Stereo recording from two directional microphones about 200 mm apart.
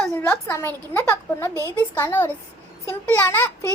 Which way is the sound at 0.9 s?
15° left (ahead or behind).